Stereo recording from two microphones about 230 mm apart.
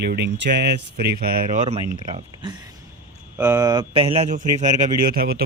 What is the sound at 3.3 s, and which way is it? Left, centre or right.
Speech, centre.